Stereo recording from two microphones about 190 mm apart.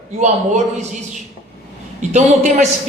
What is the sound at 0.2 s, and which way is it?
Speech, 35° right (ahead or behind).